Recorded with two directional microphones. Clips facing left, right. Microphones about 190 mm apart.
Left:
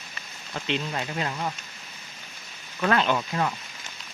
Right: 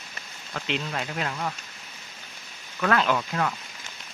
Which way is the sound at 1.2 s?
10° left (ahead or behind).